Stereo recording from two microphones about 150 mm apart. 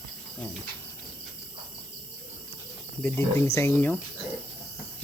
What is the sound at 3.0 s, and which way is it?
Speech, 15° left (ahead or behind).